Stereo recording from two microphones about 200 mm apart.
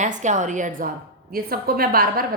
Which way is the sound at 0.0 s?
35° right (ahead or behind).